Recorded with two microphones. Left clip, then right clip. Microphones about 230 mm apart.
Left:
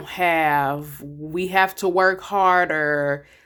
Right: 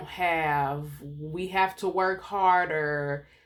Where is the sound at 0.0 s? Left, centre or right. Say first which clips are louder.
Left 7 dB; left.